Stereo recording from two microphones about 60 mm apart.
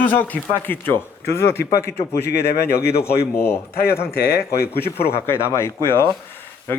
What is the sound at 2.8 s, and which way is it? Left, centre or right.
Speech, left.